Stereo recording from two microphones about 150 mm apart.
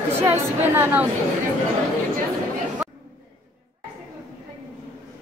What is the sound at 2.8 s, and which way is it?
Chatter, 5° right (ahead or behind).